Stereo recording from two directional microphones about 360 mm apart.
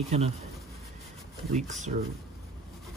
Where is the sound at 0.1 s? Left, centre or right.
Centre.